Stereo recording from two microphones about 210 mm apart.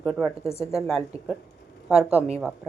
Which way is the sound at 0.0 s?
5° left (ahead or behind).